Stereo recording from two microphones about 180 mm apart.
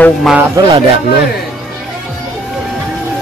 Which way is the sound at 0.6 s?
25° right (ahead or behind).